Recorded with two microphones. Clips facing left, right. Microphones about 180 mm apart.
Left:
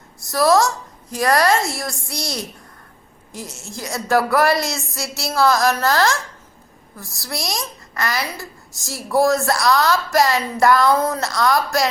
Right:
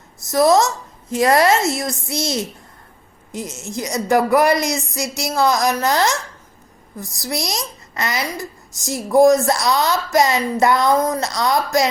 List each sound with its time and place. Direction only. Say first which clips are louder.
0.2 s a child's voice: right 2 dB; 20° right (ahead or behind)